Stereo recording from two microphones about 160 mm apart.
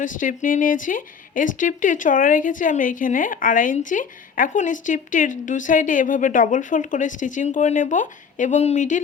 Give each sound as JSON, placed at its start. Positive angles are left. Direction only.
{"t": 0.0, "sound": "speech", "side_deg": 55}